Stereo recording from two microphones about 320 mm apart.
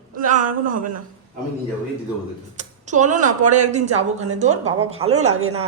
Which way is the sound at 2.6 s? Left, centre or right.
Right.